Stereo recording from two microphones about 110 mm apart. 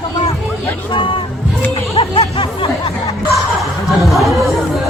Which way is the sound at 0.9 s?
50° left (ahead or behind).